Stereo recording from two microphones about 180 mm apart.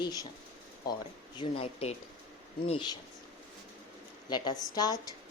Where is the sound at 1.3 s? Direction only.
30° left (ahead or behind).